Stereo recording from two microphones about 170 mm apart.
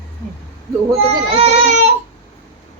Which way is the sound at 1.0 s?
35° right (ahead or behind).